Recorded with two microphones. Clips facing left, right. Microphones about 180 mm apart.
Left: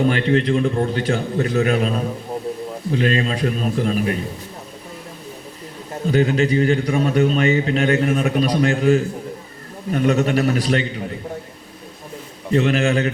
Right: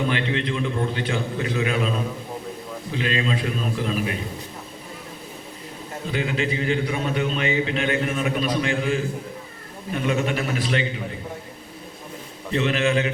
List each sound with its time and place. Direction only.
0.0 s a man's voice: 40° left (ahead or behind)
2.9 s a man's voice: 45° left (ahead or behind)
6.1 s a man's voice: 45° left (ahead or behind)
12.5 s a man's voice: 45° left (ahead or behind)